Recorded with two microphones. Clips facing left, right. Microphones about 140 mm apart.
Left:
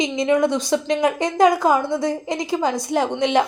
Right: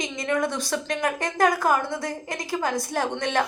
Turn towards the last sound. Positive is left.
turn(degrees=15)  # may be behind; listen again after turning